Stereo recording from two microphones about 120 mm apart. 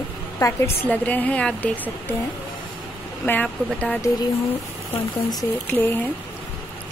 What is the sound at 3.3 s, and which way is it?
Speech, 10° left (ahead or behind).